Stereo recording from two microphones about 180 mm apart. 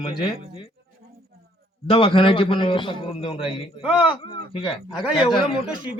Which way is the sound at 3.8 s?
5° right (ahead or behind).